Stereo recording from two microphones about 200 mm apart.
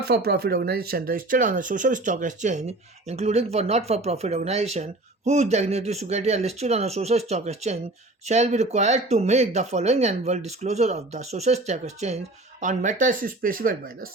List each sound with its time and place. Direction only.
0.1 s speech: 50° right (ahead or behind)